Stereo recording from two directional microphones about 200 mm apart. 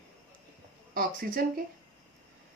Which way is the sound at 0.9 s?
45° right (ahead or behind).